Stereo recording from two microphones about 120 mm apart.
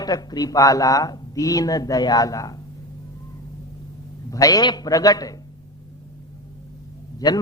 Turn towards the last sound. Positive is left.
turn(degrees=35)  # may be behind; listen again after turning